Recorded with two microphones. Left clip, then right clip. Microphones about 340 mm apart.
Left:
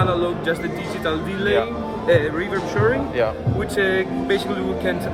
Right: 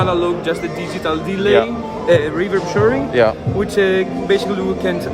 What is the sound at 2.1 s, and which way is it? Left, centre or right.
Speech, centre.